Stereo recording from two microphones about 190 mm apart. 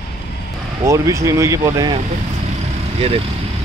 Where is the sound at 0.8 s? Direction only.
15° right (ahead or behind).